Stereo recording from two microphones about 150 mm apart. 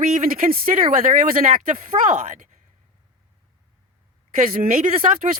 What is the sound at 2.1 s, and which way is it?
Speech, 50° right (ahead or behind).